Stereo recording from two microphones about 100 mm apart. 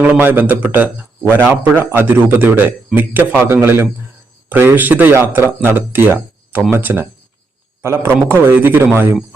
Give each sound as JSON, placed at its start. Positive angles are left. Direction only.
{"t": 0.0, "sound": "a man's voice", "side_deg": -20}